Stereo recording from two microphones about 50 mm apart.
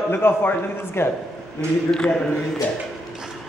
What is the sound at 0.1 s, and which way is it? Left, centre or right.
Speech, left.